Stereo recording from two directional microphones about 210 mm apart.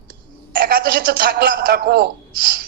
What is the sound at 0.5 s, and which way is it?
A man's voice, 45° right (ahead or behind).